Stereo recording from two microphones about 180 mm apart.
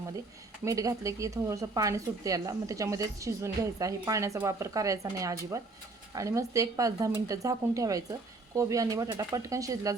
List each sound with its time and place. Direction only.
0.6 s speech: 20° right (ahead or behind)